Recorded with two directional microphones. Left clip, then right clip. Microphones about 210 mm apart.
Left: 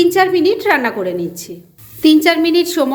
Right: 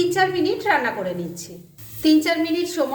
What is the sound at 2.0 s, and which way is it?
Speech, 45° left (ahead or behind).